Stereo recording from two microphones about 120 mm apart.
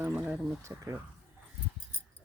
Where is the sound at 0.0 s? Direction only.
10° right (ahead or behind).